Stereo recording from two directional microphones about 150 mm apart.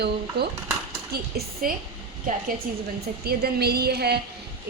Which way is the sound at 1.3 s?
80° right.